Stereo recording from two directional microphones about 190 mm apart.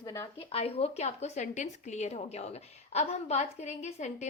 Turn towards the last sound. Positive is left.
turn(degrees=35)  # may be behind; listen again after turning